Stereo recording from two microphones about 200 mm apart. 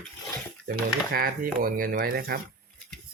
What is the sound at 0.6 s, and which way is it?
Speech, 45° right (ahead or behind).